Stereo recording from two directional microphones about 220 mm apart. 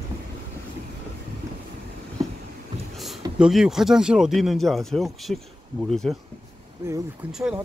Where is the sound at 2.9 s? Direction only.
Centre (ahead or behind).